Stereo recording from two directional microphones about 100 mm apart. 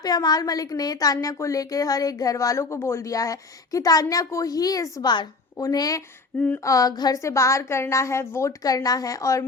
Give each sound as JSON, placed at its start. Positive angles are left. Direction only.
{"t": 0.0, "sound": "a woman's voice", "side_deg": 40}
{"t": 7.2, "sound": "a woman's voice", "side_deg": 30}